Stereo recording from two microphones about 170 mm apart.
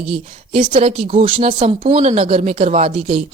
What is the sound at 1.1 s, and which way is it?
Speech, 30° right (ahead or behind).